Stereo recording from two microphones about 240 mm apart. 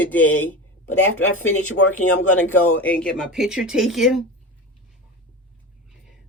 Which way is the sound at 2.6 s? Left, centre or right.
Left.